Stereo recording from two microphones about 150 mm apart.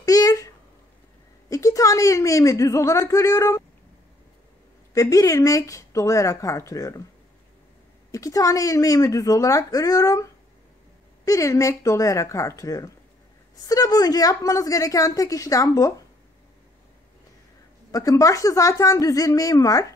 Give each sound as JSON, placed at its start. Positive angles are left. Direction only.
{"t": 0.0, "sound": "a sound", "side_deg": 25}
{"t": 1.5, "sound": "speech", "side_deg": 20}
{"t": 4.9, "sound": "speech", "side_deg": 20}
{"t": 8.1, "sound": "speech", "side_deg": 20}
{"t": 17.9, "sound": "speech", "side_deg": 25}